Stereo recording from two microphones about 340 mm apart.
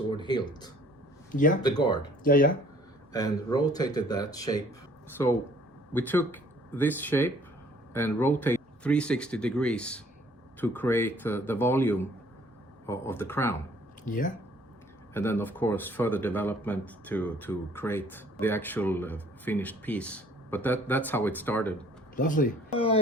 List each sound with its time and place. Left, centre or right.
0.2 s speech: centre
1.3 s a child's voice: left
1.6 s speech: centre
2.2 s a child's voice: left
3.1 s speech: centre
5.9 s speech: centre
14.0 s a child's voice: left
15.1 s speech: centre
22.1 s a child's voice: left